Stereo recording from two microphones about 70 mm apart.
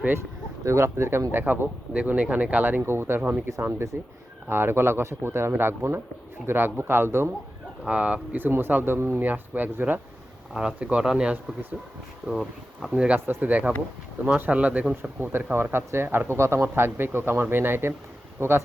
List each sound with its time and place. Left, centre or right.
0.6 s speech: right
1.3 s speech: right
7.9 s speech: centre
10.5 s speech: centre
12.9 s speech: centre
13.1 s speech: right
15.2 s speech: right